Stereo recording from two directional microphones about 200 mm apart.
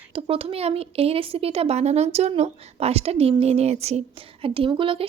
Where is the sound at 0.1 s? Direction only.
25° right (ahead or behind).